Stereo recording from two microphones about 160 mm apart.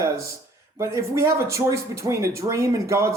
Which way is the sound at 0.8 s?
15° right (ahead or behind).